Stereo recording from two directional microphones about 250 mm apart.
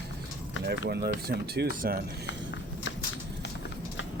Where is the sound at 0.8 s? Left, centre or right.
Right.